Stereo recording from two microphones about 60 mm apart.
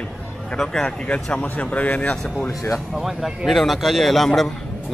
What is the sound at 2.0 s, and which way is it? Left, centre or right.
Speech, centre.